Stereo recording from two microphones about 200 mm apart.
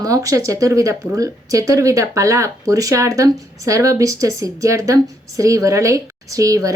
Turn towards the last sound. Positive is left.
turn(degrees=-15)  # may be behind; listen again after turning